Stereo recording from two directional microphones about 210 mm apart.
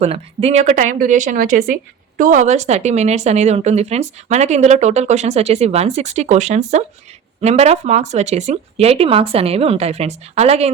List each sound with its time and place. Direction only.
0.0 s speech: 30° right (ahead or behind)